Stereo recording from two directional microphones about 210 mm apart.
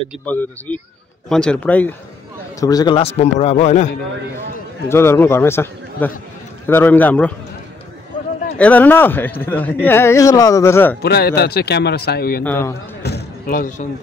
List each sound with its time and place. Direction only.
0.2 s speech: 5° left (ahead or behind)
2.6 s a man's voice: 20° left (ahead or behind); by 3.9 s 35° left (ahead or behind)
4.8 s speech: 10° left (ahead or behind)
8.5 s speech: 5° left (ahead or behind)
11.0 s speech: 50° left (ahead or behind)
12.4 s speech: 10° left (ahead or behind)
13.0 s music: 45° left (ahead or behind)